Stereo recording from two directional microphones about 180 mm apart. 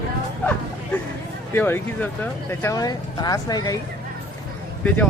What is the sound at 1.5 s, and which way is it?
Speech, 10° left (ahead or behind).